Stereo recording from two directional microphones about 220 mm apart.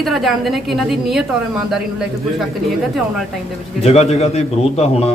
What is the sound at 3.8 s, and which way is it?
A man's voice, 30° left (ahead or behind).